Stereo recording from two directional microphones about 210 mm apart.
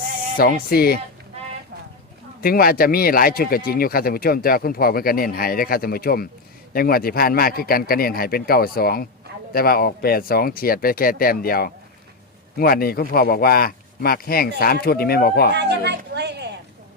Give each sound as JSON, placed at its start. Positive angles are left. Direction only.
{"t": 0.3, "sound": "speech", "side_deg": 45}
{"t": 2.4, "sound": "speech", "side_deg": 45}
{"t": 15.5, "sound": "a sound", "side_deg": -55}